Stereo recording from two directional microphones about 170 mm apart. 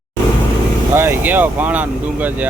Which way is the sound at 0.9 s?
15° right (ahead or behind).